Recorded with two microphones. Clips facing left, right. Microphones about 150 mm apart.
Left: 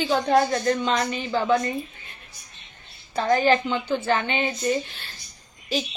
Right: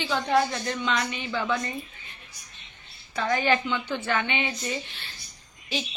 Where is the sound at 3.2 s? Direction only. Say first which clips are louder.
Left 5 dB; 35° left (ahead or behind).